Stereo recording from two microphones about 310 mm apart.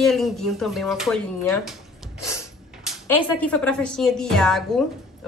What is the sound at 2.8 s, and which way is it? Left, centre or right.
A woman's voice, centre.